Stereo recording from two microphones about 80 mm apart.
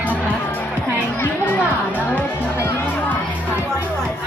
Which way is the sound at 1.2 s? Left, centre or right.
Left.